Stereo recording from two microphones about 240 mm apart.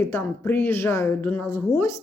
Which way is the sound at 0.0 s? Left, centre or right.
Centre.